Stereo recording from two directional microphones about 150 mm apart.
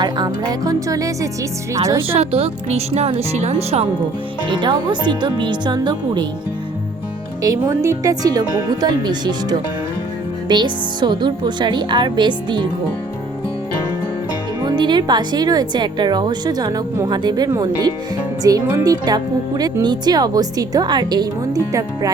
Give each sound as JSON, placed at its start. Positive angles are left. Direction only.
{"t": 0.0, "sound": "speech", "side_deg": -25}
{"t": 2.0, "sound": "speech", "side_deg": -40}
{"t": 4.4, "sound": "speech", "side_deg": -30}
{"t": 7.4, "sound": "speech", "side_deg": -25}
{"t": 14.6, "sound": "speech", "side_deg": -30}